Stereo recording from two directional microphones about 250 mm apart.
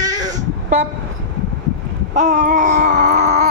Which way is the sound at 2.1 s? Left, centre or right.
Right.